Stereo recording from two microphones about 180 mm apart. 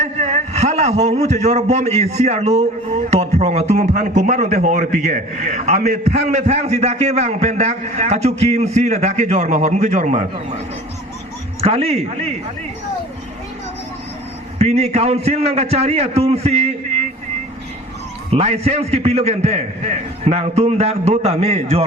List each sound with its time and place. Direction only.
0.0 s a man's voice: 40° right (ahead or behind)
11.6 s a man's voice: 35° right (ahead or behind)
14.6 s a man's voice: 35° right (ahead or behind)
18.3 s a man's voice: 35° right (ahead or behind)